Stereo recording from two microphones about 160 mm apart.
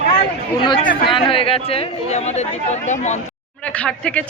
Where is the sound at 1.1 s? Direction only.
35° left (ahead or behind).